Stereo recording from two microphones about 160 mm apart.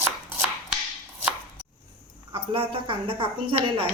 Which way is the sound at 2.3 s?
35° right (ahead or behind).